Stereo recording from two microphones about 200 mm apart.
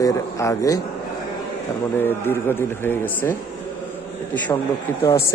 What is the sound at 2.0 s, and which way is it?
A man's voice, 10° left (ahead or behind).